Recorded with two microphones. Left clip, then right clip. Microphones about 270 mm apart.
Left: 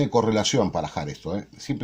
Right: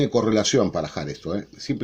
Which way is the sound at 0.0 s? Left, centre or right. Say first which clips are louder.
Right 1 dB; left.